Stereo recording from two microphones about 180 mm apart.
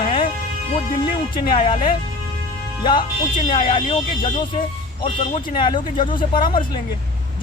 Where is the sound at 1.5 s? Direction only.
30° left (ahead or behind).